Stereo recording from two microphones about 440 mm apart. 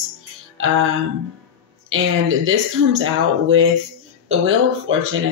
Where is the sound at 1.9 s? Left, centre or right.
Right.